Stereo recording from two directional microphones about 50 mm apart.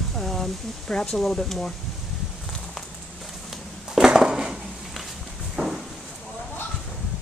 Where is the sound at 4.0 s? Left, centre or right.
Centre.